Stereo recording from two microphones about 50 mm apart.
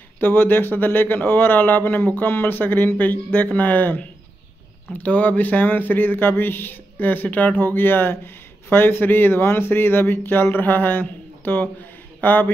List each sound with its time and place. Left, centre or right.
0.2 s speech: left